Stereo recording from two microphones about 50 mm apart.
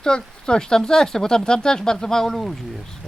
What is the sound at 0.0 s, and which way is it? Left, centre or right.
Speech, centre.